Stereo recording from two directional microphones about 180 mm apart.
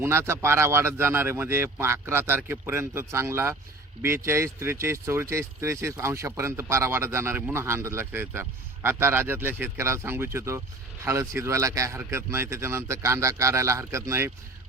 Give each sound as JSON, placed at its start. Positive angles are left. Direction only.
{"t": 0.0, "sound": "speech", "side_deg": -15}